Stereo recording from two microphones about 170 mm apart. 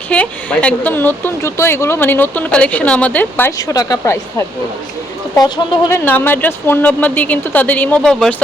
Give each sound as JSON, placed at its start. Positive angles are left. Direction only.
{"t": 0.1, "sound": "speech", "side_deg": 5}
{"t": 5.9, "sound": "speech", "side_deg": 10}